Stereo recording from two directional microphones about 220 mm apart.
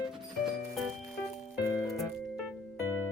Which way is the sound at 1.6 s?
15° left (ahead or behind).